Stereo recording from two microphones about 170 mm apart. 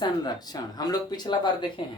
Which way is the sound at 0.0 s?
25° left (ahead or behind).